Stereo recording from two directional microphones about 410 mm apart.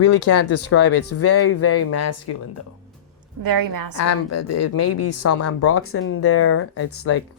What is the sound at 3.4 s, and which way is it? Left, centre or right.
Speech, right.